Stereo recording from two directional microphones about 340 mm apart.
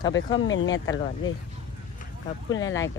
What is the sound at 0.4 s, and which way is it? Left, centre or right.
Speech, left.